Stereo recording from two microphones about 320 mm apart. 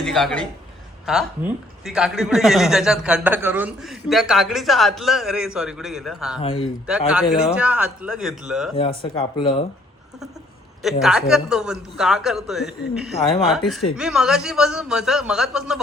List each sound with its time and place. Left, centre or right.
0.0 s a man's voice: centre
6.4 s speech: centre
6.8 s a man's voice: centre
8.7 s speech: centre
11.0 s a man's voice: centre